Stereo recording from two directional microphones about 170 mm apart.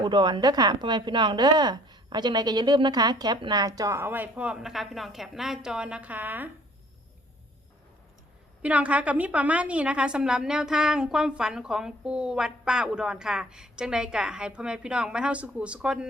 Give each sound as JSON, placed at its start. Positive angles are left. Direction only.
{"t": 0.0, "sound": "a woman's voice", "side_deg": -25}
{"t": 8.6, "sound": "a woman's voice", "side_deg": -10}